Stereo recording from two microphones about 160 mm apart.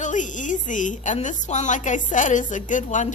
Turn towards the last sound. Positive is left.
turn(degrees=50)  # may be behind; listen again after turning